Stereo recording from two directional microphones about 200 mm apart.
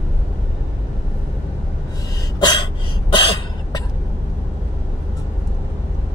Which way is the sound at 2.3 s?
20° left (ahead or behind).